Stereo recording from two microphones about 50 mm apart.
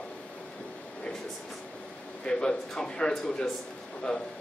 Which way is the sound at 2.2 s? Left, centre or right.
Centre.